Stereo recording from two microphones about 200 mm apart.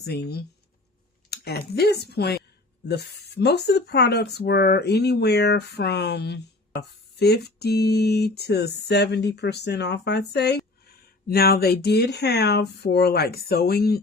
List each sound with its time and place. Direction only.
0.0 s speech: 55° left (ahead or behind)